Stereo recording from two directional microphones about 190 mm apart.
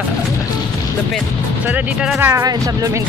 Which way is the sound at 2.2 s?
15° right (ahead or behind).